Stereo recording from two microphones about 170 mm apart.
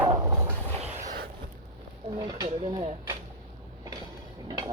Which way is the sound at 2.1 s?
25° right (ahead or behind).